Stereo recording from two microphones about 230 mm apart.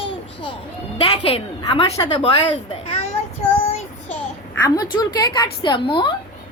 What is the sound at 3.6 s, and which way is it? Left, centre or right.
Child singing, left.